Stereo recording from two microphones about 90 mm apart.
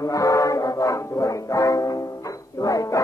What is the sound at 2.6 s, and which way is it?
Bow-wow, 40° left (ahead or behind).